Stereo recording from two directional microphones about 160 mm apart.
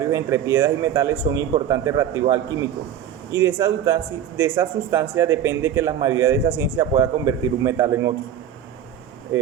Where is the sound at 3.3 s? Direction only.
15° right (ahead or behind).